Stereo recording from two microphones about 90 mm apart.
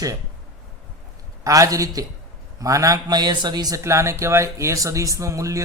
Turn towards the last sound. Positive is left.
turn(degrees=-35)  # may be behind; listen again after turning